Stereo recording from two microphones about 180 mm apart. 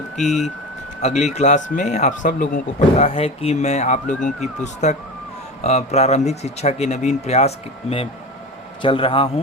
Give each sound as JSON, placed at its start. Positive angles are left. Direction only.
{"t": 0.2, "sound": "speech", "side_deg": 0}
{"t": 1.0, "sound": "speech", "side_deg": 40}
{"t": 3.1, "sound": "speech", "side_deg": 35}
{"t": 4.1, "sound": "speech", "side_deg": 5}
{"t": 4.6, "sound": "a man's voice", "side_deg": 40}